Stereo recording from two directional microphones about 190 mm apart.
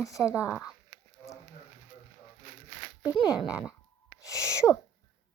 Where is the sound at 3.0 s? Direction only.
20° left (ahead or behind).